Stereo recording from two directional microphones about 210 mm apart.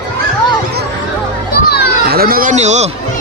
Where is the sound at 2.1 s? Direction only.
45° right (ahead or behind).